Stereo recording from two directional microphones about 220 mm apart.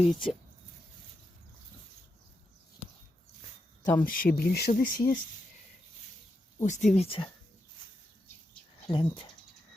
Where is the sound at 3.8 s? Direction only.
10° left (ahead or behind).